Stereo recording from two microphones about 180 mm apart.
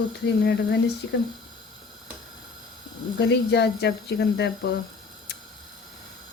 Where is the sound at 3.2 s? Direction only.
70° left (ahead or behind).